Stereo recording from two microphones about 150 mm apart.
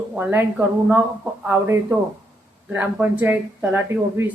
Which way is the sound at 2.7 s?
10° right (ahead or behind).